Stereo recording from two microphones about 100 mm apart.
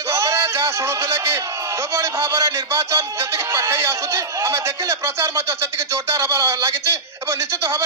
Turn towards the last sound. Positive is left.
turn(degrees=-30)  # may be behind; listen again after turning